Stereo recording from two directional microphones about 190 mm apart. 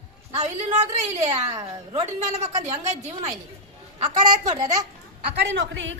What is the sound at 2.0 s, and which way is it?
A woman's voice, 40° right (ahead or behind).